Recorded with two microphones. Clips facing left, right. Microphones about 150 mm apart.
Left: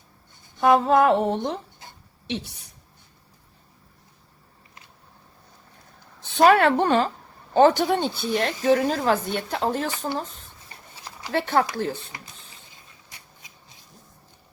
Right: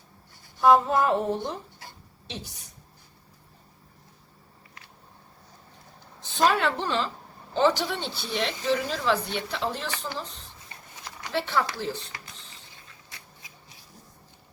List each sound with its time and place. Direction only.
0.6 s a sound: 75° left (ahead or behind)
2.2 s a woman's voice: 70° left (ahead or behind)
6.2 s a woman's voice: 65° left (ahead or behind); by 9.9 s 45° left (ahead or behind)
11.3 s speech: 50° left (ahead or behind)
13.1 s shuffle: 20° left (ahead or behind)